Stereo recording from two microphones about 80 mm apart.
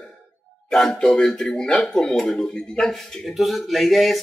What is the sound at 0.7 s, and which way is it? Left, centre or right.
Speech, centre.